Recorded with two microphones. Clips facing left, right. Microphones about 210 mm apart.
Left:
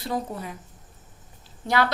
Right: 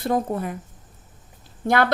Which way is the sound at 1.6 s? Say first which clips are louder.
Right 3 dB; 55° right (ahead or behind).